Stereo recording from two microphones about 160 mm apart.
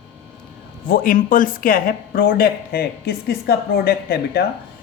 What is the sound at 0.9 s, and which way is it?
Speech, 60° left (ahead or behind).